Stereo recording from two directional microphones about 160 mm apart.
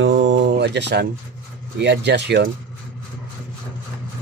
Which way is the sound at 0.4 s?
90° right.